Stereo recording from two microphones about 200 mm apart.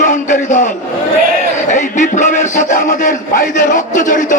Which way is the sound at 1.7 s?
40° left (ahead or behind).